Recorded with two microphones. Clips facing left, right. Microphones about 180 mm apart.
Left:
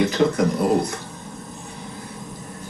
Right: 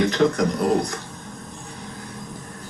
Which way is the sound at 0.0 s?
5° left (ahead or behind).